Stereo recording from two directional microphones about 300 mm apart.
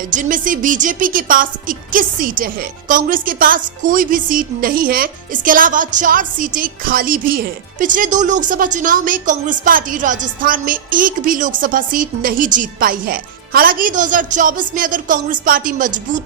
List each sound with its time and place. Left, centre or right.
0.1 s speech: right